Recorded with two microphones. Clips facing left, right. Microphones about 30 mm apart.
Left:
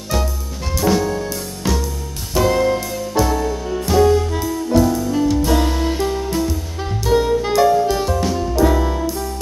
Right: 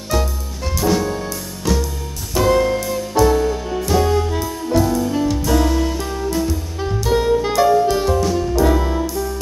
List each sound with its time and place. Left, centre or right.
0.7 s music: centre
1.6 s music: centre
2.3 s music: centre
3.3 s music: centre
5.6 s music: centre
6.3 s music: centre